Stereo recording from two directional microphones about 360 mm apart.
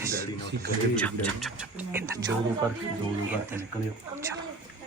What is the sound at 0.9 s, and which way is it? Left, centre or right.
A woman's voice, centre.